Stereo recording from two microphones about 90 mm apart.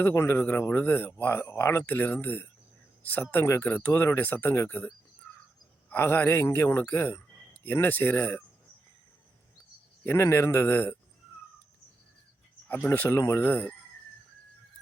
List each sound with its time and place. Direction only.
0.0 s speech: 25° left (ahead or behind)
5.9 s speech: 20° left (ahead or behind)
10.0 s speech: 25° left (ahead or behind)
12.6 s speech: 20° left (ahead or behind)